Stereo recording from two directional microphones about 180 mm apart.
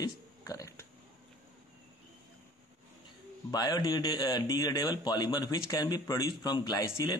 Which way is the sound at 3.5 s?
20° left (ahead or behind).